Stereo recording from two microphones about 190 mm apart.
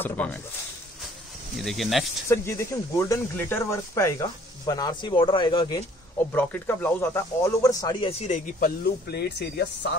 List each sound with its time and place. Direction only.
0.0 s speech: 10° left (ahead or behind)
1.6 s speech: centre (ahead or behind)
2.2 s speech: 15° left (ahead or behind)
6.3 s speech: 10° left (ahead or behind); by 9.3 s 60° left (ahead or behind)